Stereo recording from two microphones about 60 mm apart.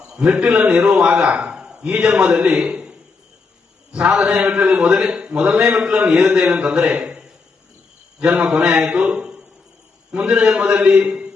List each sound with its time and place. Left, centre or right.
0.1 s a man's voice: centre
3.9 s a man's voice: centre
8.4 s a man's voice: centre